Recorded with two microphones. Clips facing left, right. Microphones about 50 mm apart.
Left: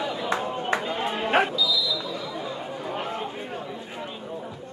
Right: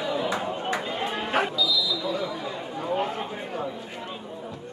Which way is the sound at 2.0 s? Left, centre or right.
Right.